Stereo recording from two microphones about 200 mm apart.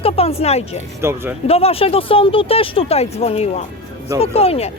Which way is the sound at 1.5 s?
30° left (ahead or behind).